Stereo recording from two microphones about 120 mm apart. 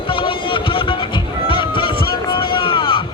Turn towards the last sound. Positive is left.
turn(degrees=45)  # may be behind; listen again after turning